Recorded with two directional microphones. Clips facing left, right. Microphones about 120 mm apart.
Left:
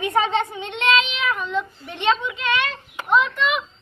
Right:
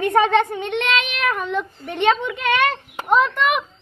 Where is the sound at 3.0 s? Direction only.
40° right (ahead or behind).